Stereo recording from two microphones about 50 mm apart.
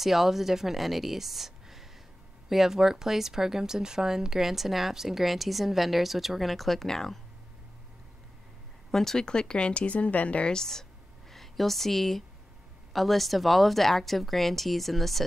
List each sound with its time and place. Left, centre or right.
0.0 s a woman's voice: centre
8.9 s speech: centre; by 10.5 s left
10.5 s a sound: centre
12.9 s speech: centre